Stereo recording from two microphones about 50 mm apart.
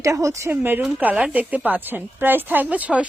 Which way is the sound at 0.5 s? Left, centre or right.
Right.